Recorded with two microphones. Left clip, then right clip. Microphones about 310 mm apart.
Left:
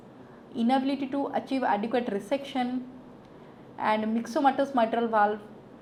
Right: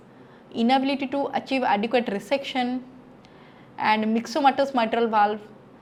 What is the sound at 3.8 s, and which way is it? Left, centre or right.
A woman's voice, right.